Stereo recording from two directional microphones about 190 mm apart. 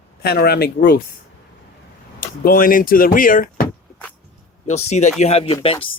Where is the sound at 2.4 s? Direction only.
50° left (ahead or behind).